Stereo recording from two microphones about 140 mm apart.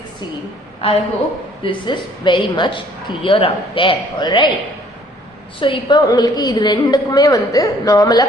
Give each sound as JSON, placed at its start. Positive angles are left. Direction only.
{"t": 0.8, "sound": "a woman's voice", "side_deg": 45}
{"t": 5.5, "sound": "a woman's voice", "side_deg": 35}